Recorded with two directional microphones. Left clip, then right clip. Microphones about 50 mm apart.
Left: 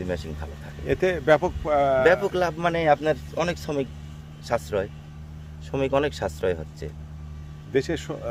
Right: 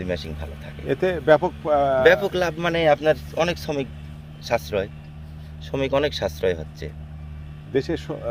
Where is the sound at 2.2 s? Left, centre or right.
Left.